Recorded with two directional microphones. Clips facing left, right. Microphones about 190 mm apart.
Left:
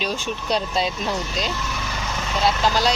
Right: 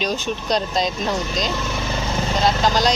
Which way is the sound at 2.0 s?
35° right (ahead or behind).